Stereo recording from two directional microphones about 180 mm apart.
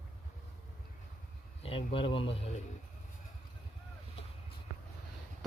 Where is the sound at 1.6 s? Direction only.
30° left (ahead or behind).